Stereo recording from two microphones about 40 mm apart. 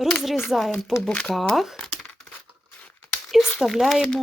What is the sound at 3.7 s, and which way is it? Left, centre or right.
Speech, centre.